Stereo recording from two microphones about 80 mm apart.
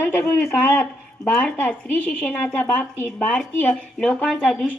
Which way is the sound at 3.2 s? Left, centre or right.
Centre.